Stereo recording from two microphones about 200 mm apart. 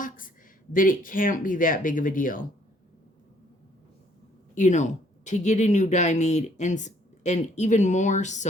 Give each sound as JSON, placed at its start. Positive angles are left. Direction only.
{"t": 0.7, "sound": "speech", "side_deg": 45}
{"t": 4.5, "sound": "speech", "side_deg": 35}